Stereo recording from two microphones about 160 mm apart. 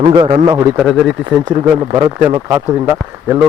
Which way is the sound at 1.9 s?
30° right (ahead or behind).